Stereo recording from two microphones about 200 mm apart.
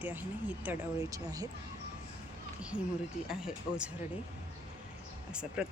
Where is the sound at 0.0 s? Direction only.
10° right (ahead or behind).